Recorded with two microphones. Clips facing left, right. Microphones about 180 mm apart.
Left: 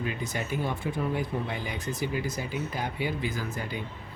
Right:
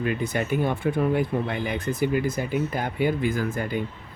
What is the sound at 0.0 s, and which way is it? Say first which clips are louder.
Speech: right 7 dB; 60° right (ahead or behind).